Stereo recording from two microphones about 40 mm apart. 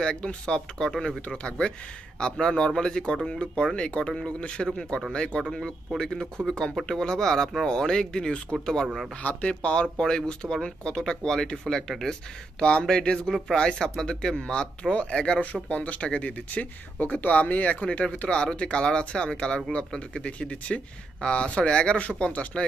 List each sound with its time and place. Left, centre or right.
0.0 s speech: left
0.7 s speech: centre
9.2 s speech: left